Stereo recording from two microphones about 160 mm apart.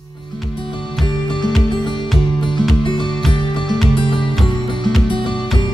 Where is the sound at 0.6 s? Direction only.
30° left (ahead or behind).